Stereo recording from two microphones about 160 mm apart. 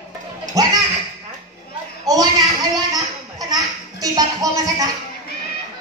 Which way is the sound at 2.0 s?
25° right (ahead or behind).